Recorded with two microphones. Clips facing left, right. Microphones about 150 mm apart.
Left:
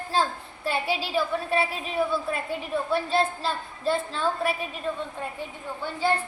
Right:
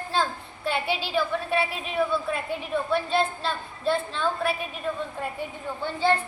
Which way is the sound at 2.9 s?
35° left (ahead or behind).